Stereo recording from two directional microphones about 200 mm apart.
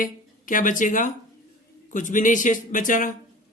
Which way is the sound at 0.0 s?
40° left (ahead or behind).